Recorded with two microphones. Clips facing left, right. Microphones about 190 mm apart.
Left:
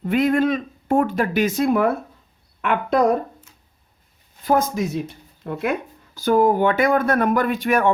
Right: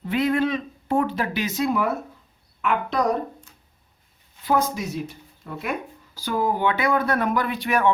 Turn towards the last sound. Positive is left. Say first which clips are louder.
# left 3 dB
turn(degrees=45)  # may be behind; listen again after turning